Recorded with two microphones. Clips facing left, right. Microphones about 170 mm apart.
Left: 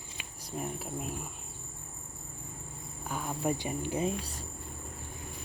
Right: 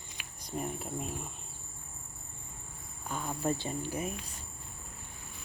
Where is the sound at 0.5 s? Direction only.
Centre (ahead or behind).